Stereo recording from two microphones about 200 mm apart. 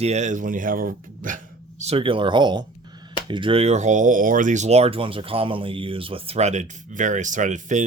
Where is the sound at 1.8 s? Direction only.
30° right (ahead or behind).